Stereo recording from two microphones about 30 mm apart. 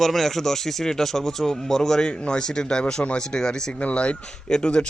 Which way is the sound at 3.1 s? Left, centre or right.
Left.